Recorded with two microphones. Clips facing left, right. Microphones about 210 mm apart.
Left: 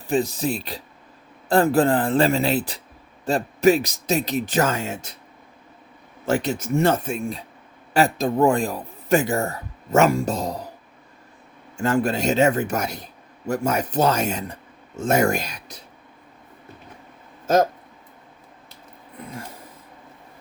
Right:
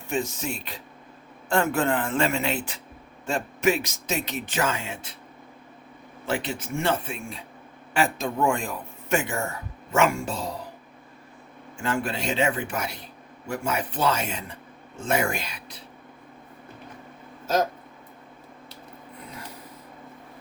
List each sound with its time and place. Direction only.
0.1 s speech: 35° left (ahead or behind)
6.2 s speech: 40° left (ahead or behind)
11.8 s speech: 40° left (ahead or behind)
17.4 s a sound: 50° left (ahead or behind)